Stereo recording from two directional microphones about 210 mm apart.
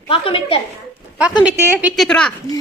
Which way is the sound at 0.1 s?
25° left (ahead or behind).